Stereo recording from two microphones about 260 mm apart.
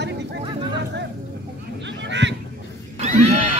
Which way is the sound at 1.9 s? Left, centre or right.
Right.